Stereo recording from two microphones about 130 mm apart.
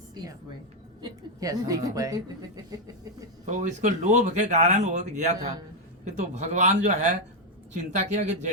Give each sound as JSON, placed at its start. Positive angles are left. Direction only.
{"t": 1.0, "sound": "a woman's voice", "side_deg": -25}
{"t": 3.4, "sound": "speech", "side_deg": -65}